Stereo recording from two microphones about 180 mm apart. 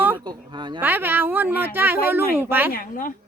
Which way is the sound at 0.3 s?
25° right (ahead or behind).